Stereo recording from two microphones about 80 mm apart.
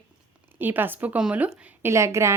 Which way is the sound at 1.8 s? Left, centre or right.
Right.